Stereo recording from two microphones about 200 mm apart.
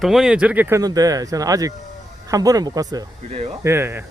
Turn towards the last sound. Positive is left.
turn(degrees=-10)  # may be behind; listen again after turning